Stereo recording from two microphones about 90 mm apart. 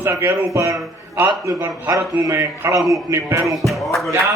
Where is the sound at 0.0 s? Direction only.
30° right (ahead or behind).